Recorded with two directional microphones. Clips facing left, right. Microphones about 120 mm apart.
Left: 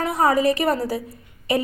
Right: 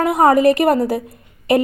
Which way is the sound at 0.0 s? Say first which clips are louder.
Right 6 dB; 50° right (ahead or behind).